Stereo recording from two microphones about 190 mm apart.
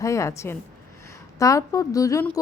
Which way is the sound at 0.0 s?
15° left (ahead or behind).